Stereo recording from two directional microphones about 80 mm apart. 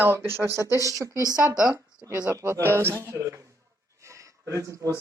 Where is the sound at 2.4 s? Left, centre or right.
Right.